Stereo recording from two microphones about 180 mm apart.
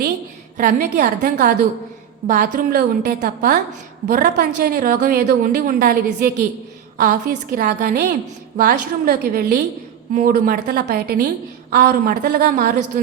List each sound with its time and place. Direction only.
0.5 s a woman's voice: 45° right (ahead or behind)